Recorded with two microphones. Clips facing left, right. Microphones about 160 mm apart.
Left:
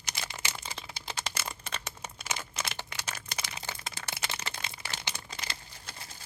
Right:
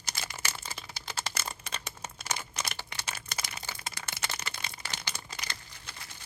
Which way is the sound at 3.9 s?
30° left (ahead or behind).